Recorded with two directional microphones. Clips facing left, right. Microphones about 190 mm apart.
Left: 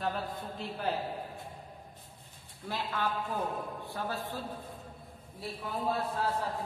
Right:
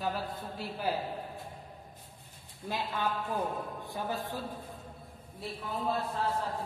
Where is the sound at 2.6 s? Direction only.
10° right (ahead or behind).